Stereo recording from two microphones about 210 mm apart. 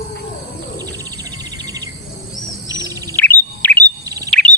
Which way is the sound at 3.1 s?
10° left (ahead or behind).